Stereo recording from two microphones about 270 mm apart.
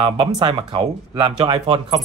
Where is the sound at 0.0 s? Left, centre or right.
Centre.